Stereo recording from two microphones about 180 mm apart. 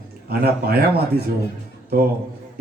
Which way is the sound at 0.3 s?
60° right (ahead or behind).